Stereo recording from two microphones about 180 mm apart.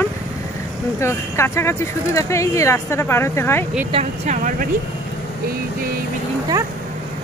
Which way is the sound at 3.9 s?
40° right (ahead or behind).